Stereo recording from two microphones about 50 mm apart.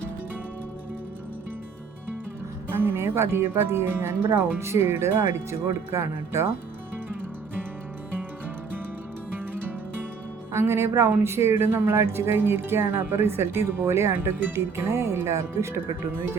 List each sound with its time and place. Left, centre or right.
2.6 s speech: right
9.3 s music: right
10.5 s speech: right